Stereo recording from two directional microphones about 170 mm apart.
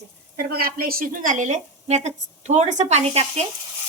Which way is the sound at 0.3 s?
60° right (ahead or behind).